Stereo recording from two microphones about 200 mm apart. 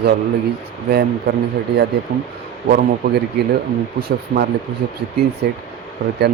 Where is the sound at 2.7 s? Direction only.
50° right (ahead or behind).